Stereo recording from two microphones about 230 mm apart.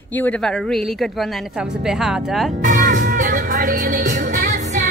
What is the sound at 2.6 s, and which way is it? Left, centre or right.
Music, right.